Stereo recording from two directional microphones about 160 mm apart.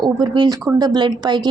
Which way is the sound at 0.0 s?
25° right (ahead or behind).